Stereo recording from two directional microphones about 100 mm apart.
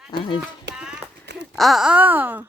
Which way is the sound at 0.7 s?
10° right (ahead or behind).